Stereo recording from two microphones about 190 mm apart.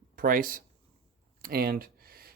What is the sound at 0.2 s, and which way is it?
Speech, 45° right (ahead or behind).